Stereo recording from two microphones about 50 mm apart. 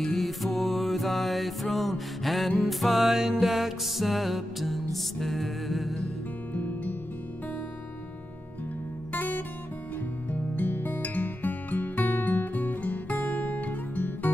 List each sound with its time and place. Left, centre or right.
0.0 s music: centre
6.5 s music: left
9.1 s music: left